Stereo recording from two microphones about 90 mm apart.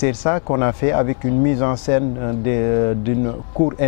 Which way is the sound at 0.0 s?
15° left (ahead or behind).